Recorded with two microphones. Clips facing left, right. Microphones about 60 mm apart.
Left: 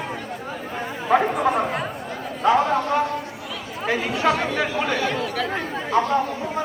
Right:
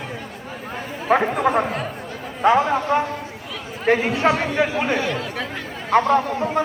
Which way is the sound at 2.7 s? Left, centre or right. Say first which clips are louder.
Right 1 dB; centre.